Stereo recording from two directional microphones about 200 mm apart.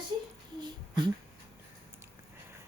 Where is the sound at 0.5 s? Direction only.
20° right (ahead or behind).